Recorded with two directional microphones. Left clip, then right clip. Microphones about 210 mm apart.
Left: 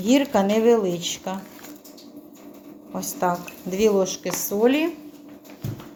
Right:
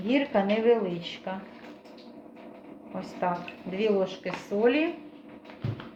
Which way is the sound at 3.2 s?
40° left (ahead or behind).